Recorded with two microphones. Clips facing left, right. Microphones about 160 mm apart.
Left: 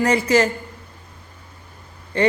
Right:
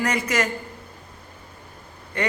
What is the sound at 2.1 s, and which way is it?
Speech, 30° left (ahead or behind).